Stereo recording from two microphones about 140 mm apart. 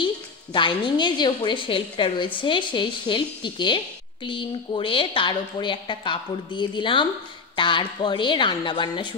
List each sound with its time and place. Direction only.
0.0 s a woman's voice: 35° left (ahead or behind)